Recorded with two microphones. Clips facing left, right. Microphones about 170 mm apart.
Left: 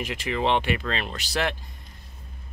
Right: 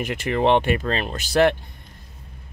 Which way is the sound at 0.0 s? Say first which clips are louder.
Right 5 dB; 50° right (ahead or behind).